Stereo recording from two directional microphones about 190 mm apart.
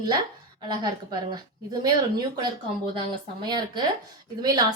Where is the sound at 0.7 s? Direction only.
20° right (ahead or behind).